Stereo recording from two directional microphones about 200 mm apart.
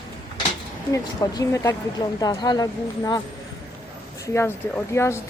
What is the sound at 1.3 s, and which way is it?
A woman's voice, 15° left (ahead or behind).